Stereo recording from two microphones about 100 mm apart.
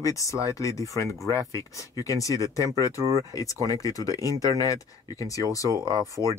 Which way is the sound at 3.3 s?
35° left (ahead or behind).